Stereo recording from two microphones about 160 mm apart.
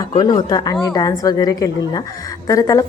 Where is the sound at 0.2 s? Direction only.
25° left (ahead or behind).